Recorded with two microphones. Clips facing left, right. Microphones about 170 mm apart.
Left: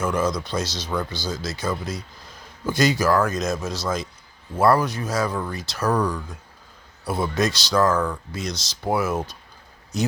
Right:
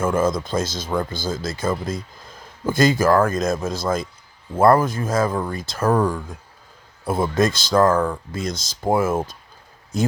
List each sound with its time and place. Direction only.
0.0 s speech: 50° right (ahead or behind)